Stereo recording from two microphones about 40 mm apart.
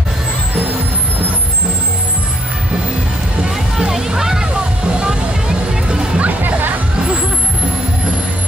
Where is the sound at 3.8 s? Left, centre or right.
Centre.